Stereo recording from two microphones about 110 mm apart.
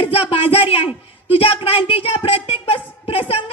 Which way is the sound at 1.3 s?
60° left (ahead or behind).